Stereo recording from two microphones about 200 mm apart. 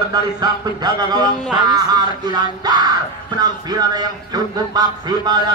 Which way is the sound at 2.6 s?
20° right (ahead or behind).